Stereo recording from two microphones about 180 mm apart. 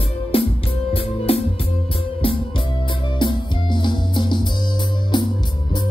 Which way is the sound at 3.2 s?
25° left (ahead or behind).